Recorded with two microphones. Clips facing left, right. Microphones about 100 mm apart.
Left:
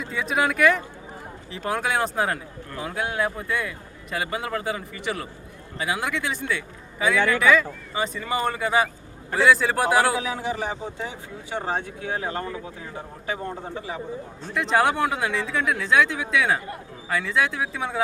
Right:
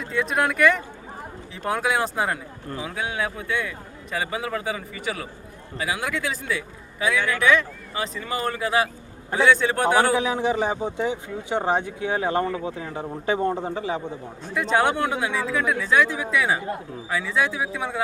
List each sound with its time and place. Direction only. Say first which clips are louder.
0.0 s a man's voice: right 1 dB; centre (ahead or behind)
10.2 s speech: right 5 dB; 20° right (ahead or behind)
14.5 s a man's voice: even; centre (ahead or behind)